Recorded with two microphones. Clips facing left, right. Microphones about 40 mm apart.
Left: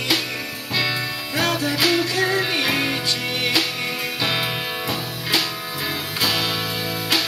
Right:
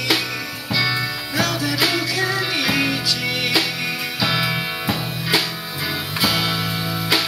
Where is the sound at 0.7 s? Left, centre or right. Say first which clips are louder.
Right 2 dB; left.